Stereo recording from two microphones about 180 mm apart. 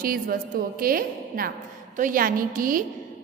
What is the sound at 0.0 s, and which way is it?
A woman's voice, 55° right (ahead or behind).